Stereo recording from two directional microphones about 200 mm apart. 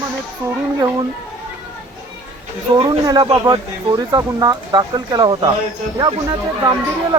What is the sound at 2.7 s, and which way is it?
Speech, 20° right (ahead or behind).